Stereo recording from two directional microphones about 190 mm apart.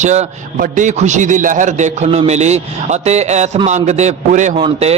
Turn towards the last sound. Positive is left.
turn(degrees=-35)  # may be behind; listen again after turning